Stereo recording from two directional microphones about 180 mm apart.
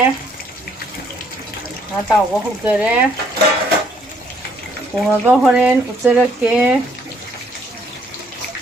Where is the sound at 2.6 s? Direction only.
5° right (ahead or behind).